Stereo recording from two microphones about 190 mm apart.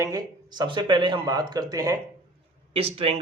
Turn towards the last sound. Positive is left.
turn(degrees=-30)  # may be behind; listen again after turning